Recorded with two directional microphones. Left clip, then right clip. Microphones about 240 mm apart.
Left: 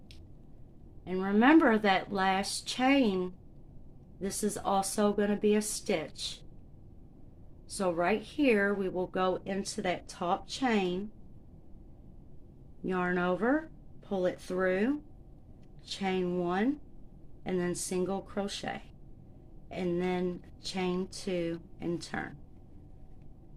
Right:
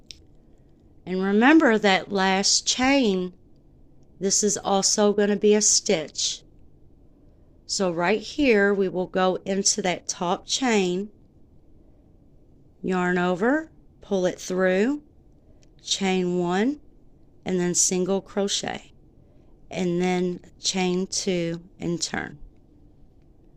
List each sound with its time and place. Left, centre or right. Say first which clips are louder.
1.0 s a woman's voice: right 7 dB; right
7.7 s a woman's voice: right 7 dB; right
12.8 s a woman's voice: right 7 dB; right